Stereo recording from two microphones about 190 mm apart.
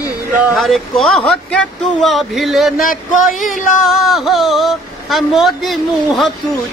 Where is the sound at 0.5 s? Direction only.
Centre (ahead or behind).